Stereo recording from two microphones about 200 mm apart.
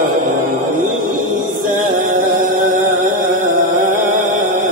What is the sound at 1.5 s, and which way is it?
Music, 40° right (ahead or behind).